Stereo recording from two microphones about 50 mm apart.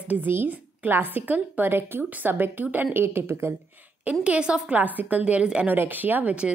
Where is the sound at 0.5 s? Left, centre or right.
Right.